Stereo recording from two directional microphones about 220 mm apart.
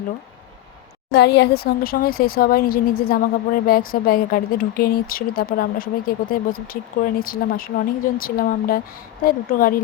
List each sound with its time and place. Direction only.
1.1 s speech: 50° left (ahead or behind)